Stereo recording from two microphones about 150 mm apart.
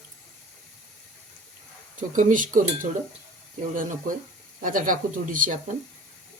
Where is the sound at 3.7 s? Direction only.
60° right (ahead or behind).